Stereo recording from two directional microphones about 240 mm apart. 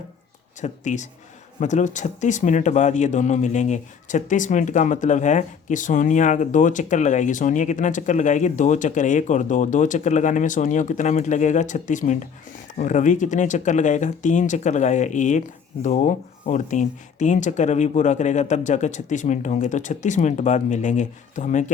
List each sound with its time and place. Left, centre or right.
0.6 s speech: left